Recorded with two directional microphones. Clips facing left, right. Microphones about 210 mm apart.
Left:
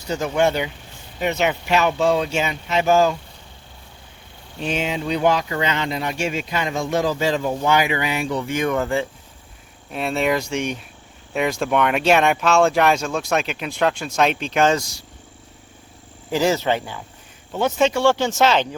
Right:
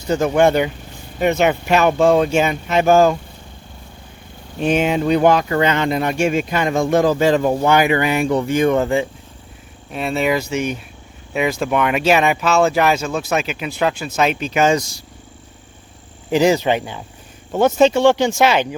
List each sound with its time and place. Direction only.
0.1 s speech: 50° right (ahead or behind)
4.6 s speech: 55° right (ahead or behind)
8.5 s speech: 25° right (ahead or behind)
9.9 s speech: centre (ahead or behind)
16.3 s speech: 15° right (ahead or behind)
17.5 s speech: 45° right (ahead or behind)
17.9 s speech: 20° right (ahead or behind)